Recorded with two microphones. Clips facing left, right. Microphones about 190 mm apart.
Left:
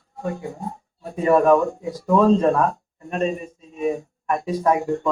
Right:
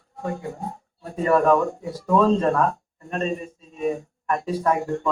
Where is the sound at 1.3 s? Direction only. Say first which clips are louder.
Left 3 dB; 15° left (ahead or behind).